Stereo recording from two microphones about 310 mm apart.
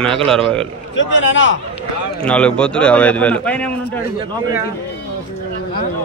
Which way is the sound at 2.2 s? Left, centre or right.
Centre.